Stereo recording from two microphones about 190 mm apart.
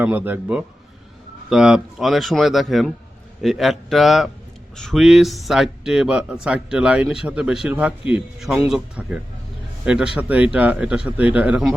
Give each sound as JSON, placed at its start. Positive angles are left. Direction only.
{"t": 0.0, "sound": "speech", "side_deg": -10}